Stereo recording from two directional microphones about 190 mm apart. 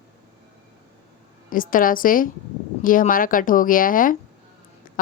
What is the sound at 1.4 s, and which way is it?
Speech, 45° left (ahead or behind).